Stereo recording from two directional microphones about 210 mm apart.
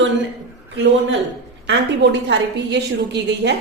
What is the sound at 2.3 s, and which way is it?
A woman's voice, 55° right (ahead or behind).